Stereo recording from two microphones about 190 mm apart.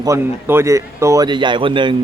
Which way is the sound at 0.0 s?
15° right (ahead or behind).